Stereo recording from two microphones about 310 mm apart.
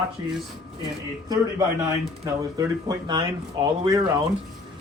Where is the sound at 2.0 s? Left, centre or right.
Centre.